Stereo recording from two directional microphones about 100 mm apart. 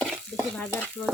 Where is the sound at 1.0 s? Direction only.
15° left (ahead or behind).